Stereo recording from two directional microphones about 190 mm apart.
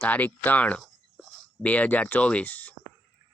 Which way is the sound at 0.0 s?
10° left (ahead or behind).